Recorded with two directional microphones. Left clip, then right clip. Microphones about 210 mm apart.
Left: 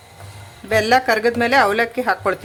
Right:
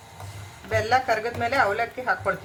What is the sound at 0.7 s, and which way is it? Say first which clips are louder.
Speech: left 7 dB; 55° left (ahead or behind).